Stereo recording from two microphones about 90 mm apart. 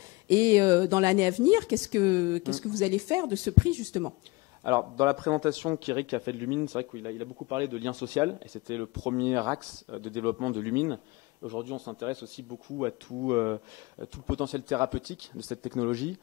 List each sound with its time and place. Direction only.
0.3 s a man's voice: 40° right (ahead or behind)